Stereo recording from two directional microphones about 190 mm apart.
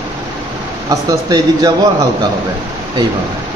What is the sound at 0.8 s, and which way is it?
Speech, 20° right (ahead or behind).